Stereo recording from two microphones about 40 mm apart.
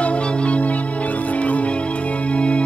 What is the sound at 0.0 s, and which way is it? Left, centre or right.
Music, left.